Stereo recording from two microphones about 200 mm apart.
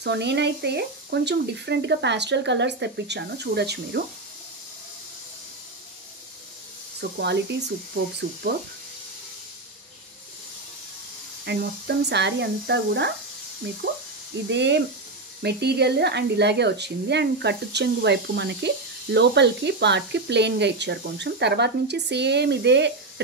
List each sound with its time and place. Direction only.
0.0 s speech: 60° right (ahead or behind)
7.0 s speech: 60° right (ahead or behind)
11.4 s speech: 55° right (ahead or behind)
14.5 s speech: 60° right (ahead or behind)